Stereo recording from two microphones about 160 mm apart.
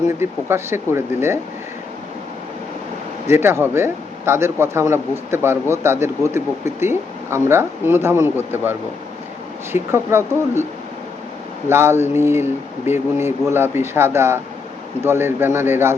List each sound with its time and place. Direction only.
0.2 s speech: 15° right (ahead or behind)
3.2 s speech: 15° right (ahead or behind)
9.7 s speech: 15° right (ahead or behind)
11.7 s speech: 15° right (ahead or behind)